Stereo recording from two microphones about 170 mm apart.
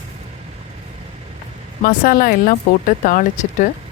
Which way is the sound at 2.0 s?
60° left (ahead or behind).